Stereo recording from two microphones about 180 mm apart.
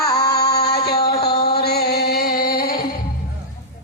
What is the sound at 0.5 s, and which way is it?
Music, 60° left (ahead or behind).